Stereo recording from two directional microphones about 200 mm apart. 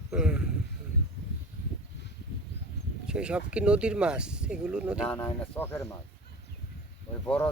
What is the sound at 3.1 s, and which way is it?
Speech, 5° right (ahead or behind).